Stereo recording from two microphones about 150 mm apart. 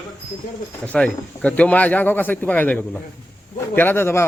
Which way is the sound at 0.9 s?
10° left (ahead or behind).